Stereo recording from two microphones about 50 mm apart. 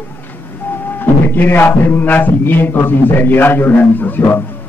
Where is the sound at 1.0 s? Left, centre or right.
Left.